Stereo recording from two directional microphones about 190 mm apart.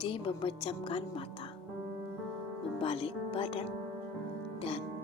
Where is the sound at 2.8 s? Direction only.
30° left (ahead or behind).